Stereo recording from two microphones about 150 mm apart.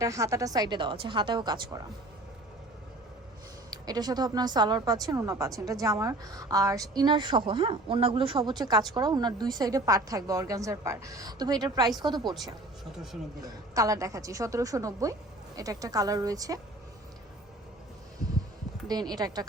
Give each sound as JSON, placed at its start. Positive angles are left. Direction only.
{"t": 0.0, "sound": "speech", "side_deg": -20}
{"t": 3.7, "sound": "speech", "side_deg": -25}
{"t": 12.2, "sound": "speech", "side_deg": 0}
{"t": 13.4, "sound": "speech", "side_deg": -20}
{"t": 18.9, "sound": "speech", "side_deg": -25}